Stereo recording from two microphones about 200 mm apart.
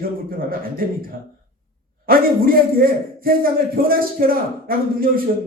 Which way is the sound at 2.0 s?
45° right (ahead or behind).